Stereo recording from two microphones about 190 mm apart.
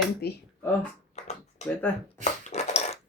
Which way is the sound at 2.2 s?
35° left (ahead or behind).